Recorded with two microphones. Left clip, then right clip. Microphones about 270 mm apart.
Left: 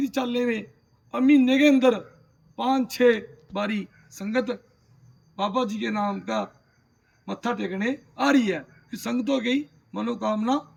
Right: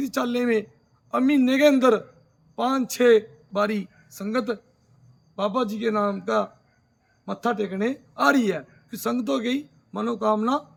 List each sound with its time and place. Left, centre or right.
0.0 s speech: centre